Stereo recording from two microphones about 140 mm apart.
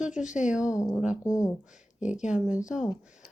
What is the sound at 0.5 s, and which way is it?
Speech, 5° right (ahead or behind).